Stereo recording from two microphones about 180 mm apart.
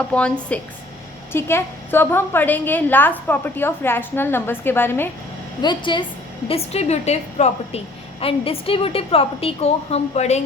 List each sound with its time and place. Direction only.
0.1 s a woman's voice: 5° left (ahead or behind)
5.6 s a woman's voice: 25° left (ahead or behind)